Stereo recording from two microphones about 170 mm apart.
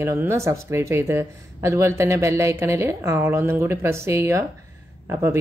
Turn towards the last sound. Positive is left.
turn(degrees=-15)  # may be behind; listen again after turning